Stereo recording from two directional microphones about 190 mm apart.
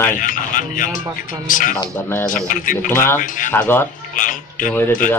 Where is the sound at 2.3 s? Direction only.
45° left (ahead or behind).